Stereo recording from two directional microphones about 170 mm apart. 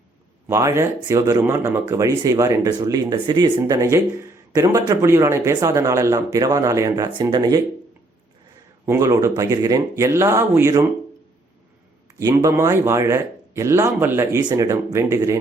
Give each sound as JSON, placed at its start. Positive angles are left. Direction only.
{"t": 0.4, "sound": "speech", "side_deg": -15}
{"t": 8.9, "sound": "speech", "side_deg": -15}
{"t": 12.2, "sound": "a man's voice", "side_deg": -20}